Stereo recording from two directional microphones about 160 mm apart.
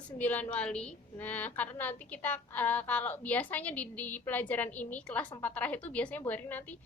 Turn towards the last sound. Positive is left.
turn(degrees=10)  # may be behind; listen again after turning